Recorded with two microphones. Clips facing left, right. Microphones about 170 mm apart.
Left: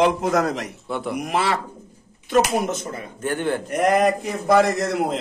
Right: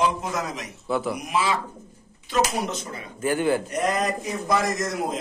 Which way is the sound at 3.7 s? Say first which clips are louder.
Left 6 dB; 60° left (ahead or behind).